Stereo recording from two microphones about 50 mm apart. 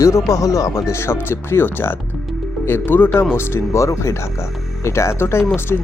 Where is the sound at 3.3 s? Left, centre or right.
Left.